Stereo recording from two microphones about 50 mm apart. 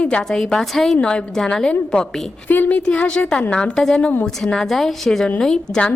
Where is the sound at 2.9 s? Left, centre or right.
Centre.